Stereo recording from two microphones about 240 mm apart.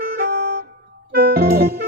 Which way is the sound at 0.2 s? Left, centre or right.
Right.